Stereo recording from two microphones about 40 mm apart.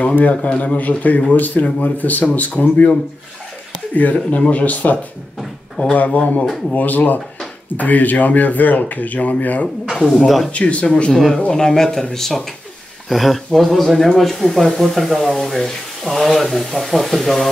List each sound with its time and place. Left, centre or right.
0.0 s speech: left
0.5 s speech: left
0.7 s speech: left
3.9 s speech: left
5.9 s speech: left
10.1 s speech: centre
10.5 s speech: left
10.9 s speech: left
13.1 s speech: centre